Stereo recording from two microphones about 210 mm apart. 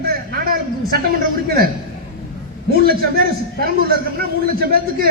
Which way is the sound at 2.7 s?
45° right (ahead or behind).